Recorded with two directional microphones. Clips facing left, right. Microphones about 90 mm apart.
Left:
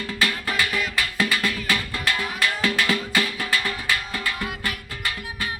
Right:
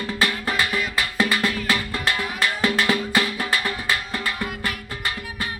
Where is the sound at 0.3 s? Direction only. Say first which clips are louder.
Right 1 dB; 25° right (ahead or behind).